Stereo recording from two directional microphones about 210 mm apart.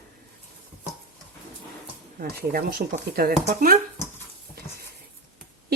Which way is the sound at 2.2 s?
45° right (ahead or behind).